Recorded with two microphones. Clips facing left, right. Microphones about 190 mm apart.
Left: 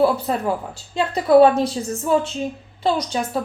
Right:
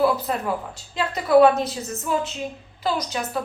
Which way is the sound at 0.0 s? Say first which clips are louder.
Left 3 dB; 30° left (ahead or behind).